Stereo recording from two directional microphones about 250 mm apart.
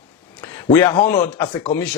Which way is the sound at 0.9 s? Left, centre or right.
Centre.